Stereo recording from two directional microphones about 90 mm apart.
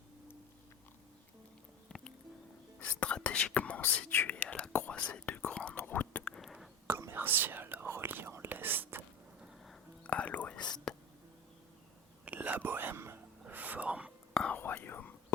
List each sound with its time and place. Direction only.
1.9 s music: 10° left (ahead or behind)
2.8 s whispering: 10° left (ahead or behind)
6.8 s whispering: 25° right (ahead or behind)
10.0 s whispering: 15° left (ahead or behind)
10.9 s a sound: 10° left (ahead or behind)
12.2 s whispering: 20° right (ahead or behind)
14.3 s whispering: 10° left (ahead or behind)